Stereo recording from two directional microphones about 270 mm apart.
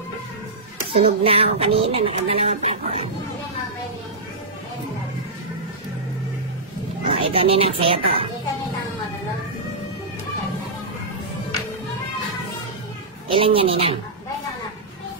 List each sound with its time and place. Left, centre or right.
0.9 s speech: right
7.1 s speech: right
13.3 s speech: centre